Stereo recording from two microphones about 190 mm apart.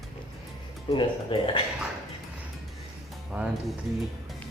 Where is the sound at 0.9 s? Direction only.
25° left (ahead or behind).